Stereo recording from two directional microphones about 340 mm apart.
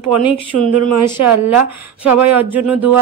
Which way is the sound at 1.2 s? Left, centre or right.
Right.